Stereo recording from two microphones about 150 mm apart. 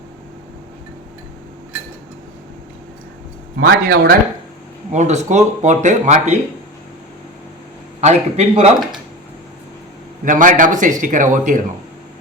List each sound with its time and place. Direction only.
3.7 s speech: 75° right (ahead or behind)
4.9 s speech: 50° right (ahead or behind)
8.0 s speech: 50° right (ahead or behind)
10.2 s a man's voice: 60° right (ahead or behind)